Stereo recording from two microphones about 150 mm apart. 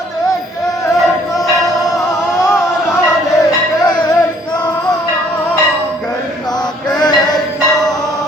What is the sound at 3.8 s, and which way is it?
Male singing, 30° left (ahead or behind).